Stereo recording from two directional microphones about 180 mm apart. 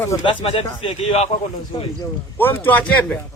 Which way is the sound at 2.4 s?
10° left (ahead or behind).